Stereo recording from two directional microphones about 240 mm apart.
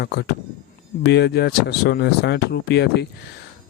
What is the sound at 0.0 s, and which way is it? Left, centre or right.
Speech, left.